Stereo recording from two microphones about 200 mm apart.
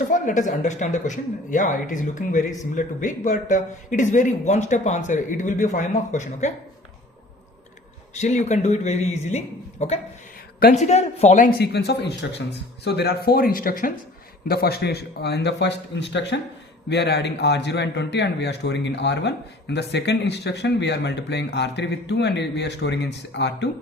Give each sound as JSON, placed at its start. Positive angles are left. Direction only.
{"t": 0.1, "sound": "speech", "side_deg": 40}
{"t": 8.1, "sound": "a man's voice", "side_deg": 35}